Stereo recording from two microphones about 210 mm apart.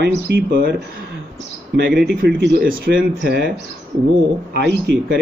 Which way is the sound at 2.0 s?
50° right (ahead or behind).